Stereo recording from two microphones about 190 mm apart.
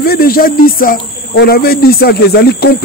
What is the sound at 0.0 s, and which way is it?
Speech, 55° left (ahead or behind).